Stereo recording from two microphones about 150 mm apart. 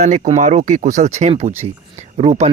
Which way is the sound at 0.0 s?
55° right (ahead or behind).